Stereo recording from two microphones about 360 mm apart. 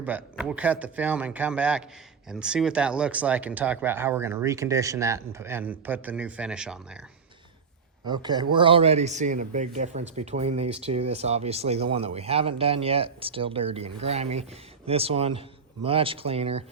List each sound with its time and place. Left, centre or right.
0.0 s speech: centre
8.0 s speech: centre